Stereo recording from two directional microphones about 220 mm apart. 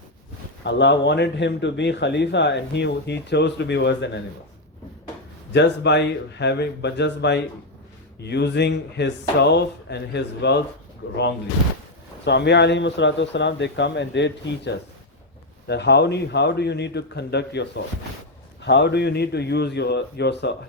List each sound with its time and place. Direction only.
0.6 s a man's voice: 50° left (ahead or behind)
5.5 s a man's voice: 50° left (ahead or behind)
12.2 s a man's voice: 50° left (ahead or behind)